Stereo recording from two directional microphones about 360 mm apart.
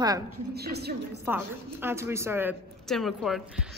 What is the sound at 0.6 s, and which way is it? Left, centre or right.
Speech, right.